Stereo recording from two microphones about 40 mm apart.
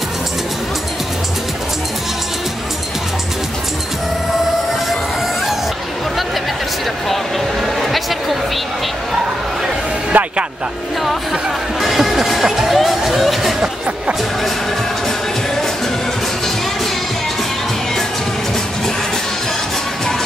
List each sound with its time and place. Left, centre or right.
7.8 s chatter: centre
10.1 s music: right
11.8 s a sound: centre